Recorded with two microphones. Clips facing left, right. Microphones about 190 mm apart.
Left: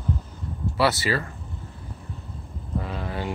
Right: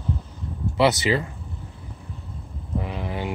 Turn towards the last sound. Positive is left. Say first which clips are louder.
# right 1 dB
turn(degrees=-15)  # may be behind; listen again after turning